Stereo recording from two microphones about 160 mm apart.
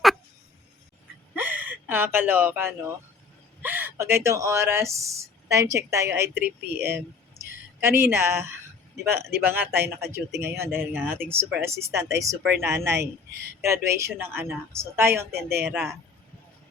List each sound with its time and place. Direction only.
1.4 s speech: 10° right (ahead or behind)
15.4 s speech: 75° right (ahead or behind)
15.6 s speech: 10° right (ahead or behind)